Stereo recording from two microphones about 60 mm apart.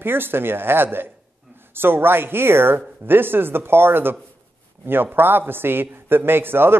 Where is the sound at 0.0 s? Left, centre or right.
Right.